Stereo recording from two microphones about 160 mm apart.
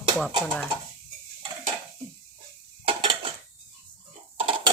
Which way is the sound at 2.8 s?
35° right (ahead or behind).